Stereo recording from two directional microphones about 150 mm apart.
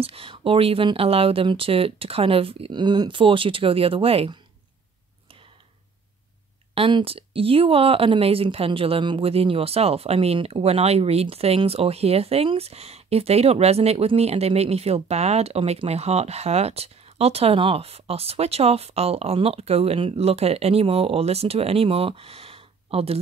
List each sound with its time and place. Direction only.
0.0 s speech: 40° right (ahead or behind)
6.7 s speech: 35° right (ahead or behind)